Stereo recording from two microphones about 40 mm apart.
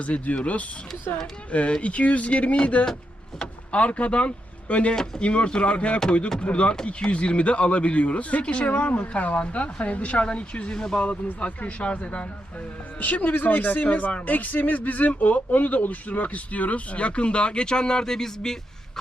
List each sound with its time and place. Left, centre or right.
0.0 s speech: left
1.1 s speech: left
1.5 s speech: left
10.8 s speech: centre
11.0 s speech: left
13.3 s speech: left
14.3 s speech: left; by 18.5 s centre